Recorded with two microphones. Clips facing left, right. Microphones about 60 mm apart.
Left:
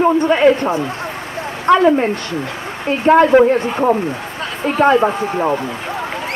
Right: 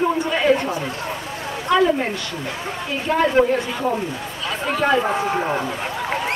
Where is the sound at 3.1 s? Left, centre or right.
Left.